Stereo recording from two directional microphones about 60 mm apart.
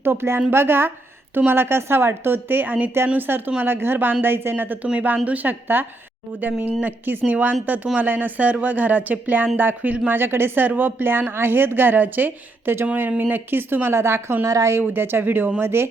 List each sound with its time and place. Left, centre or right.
0.0 s a woman's voice: right
14.4 s speech: right
14.7 s a woman's voice: right
15.6 s speech: right